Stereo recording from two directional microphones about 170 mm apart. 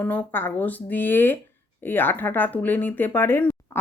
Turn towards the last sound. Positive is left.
turn(degrees=10)  # may be behind; listen again after turning